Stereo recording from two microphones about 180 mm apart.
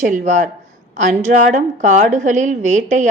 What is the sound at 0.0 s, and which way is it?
Speech, 45° right (ahead or behind).